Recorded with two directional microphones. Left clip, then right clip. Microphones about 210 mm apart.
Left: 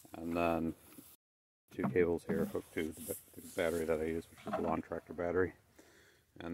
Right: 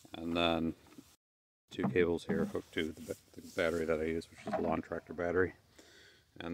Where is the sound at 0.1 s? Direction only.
5° right (ahead or behind).